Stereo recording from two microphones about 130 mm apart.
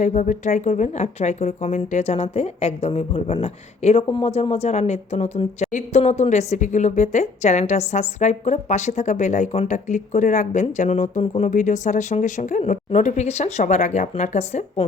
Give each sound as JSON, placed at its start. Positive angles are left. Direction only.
{"t": 0.0, "sound": "speech", "side_deg": 70}